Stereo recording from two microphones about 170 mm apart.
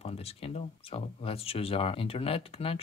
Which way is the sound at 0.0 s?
35° left (ahead or behind).